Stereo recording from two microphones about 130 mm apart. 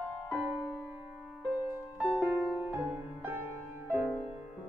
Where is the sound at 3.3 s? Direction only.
15° right (ahead or behind).